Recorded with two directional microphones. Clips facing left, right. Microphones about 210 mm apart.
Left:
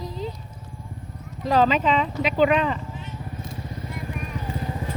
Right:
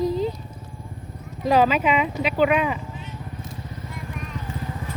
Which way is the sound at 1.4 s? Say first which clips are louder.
Right 1 dB; 10° right (ahead or behind).